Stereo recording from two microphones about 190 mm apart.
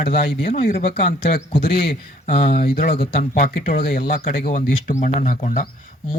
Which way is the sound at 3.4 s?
50° left (ahead or behind).